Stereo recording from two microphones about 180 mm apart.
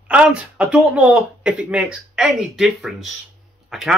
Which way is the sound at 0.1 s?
5° right (ahead or behind).